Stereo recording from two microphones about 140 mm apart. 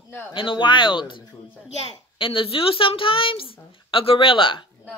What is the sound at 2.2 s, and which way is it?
A woman's voice, 40° left (ahead or behind).